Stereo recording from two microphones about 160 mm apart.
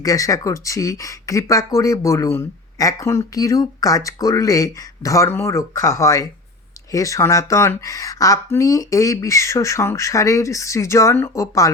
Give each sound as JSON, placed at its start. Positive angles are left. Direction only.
{"t": 0.0, "sound": "speech", "side_deg": 20}